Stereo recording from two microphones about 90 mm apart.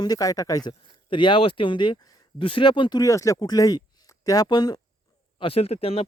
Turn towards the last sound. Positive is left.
turn(degrees=90)